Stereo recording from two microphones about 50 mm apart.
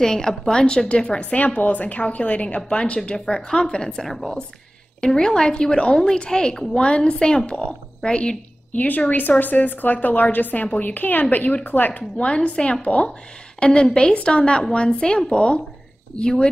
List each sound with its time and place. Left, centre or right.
0.0 s a woman's voice: centre
8.7 s a woman's voice: left
12.2 s a woman's voice: left